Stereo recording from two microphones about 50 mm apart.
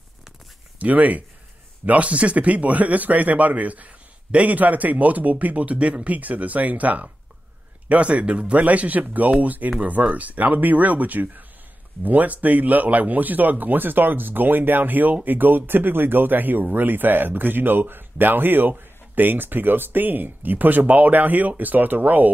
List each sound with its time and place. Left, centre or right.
0.7 s speech: right